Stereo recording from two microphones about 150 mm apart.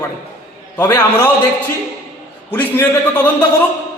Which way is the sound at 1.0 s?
15° left (ahead or behind).